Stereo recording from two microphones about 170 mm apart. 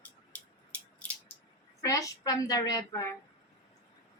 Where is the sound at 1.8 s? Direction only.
20° left (ahead or behind).